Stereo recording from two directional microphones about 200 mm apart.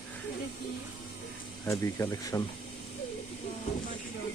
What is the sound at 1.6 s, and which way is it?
Speech, 15° left (ahead or behind).